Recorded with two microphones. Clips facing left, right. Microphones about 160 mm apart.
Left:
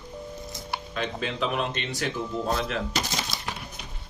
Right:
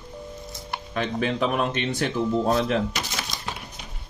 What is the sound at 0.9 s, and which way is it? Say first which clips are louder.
Speech: right 6 dB; 50° right (ahead or behind).